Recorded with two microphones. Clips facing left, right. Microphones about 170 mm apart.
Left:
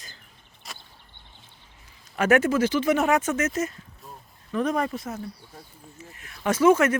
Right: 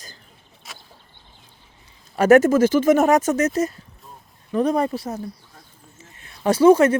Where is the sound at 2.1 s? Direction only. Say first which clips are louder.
Right 7 dB; 40° right (ahead or behind).